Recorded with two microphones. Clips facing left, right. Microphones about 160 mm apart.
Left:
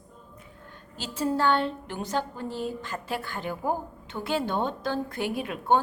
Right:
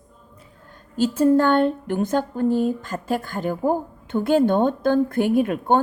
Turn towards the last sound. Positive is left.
turn(degrees=-50)  # may be behind; listen again after turning